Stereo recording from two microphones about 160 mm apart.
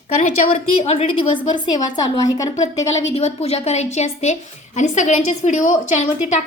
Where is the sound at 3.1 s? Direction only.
40° left (ahead or behind).